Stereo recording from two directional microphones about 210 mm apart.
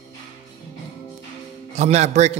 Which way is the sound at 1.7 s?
30° right (ahead or behind).